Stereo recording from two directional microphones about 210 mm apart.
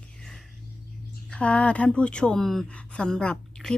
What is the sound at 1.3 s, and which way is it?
Speech, 5° left (ahead or behind).